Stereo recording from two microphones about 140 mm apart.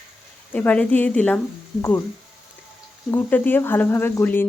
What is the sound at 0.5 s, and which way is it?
Speech, 10° left (ahead or behind).